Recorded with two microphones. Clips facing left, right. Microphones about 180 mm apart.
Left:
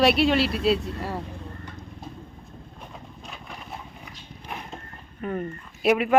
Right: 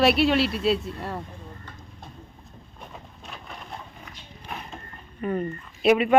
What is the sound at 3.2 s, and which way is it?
Vehicle, centre (ahead or behind).